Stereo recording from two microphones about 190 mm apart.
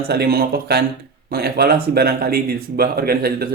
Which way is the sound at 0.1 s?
55° right (ahead or behind).